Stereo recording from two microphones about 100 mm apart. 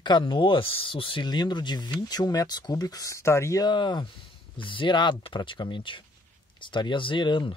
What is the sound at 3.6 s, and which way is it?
Speech, 50° left (ahead or behind).